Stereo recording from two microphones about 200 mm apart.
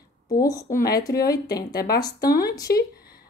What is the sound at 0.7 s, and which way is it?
Speech, 45° left (ahead or behind).